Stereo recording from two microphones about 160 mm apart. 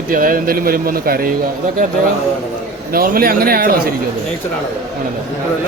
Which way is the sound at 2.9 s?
65° right (ahead or behind).